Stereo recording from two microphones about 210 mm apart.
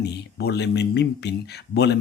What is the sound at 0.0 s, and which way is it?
Speech, 50° left (ahead or behind).